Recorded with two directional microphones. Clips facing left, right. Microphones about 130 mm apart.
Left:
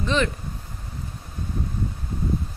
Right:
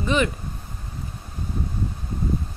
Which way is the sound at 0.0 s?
10° right (ahead or behind).